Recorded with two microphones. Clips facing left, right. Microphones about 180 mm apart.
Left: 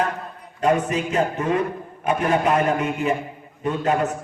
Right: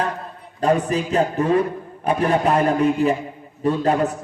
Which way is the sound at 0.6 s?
35° right (ahead or behind).